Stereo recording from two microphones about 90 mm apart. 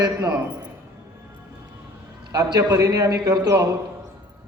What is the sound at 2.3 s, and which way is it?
A man's voice, 45° right (ahead or behind).